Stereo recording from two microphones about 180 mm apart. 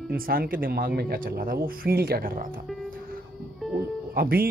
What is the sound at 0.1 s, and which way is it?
Speech, 55° right (ahead or behind).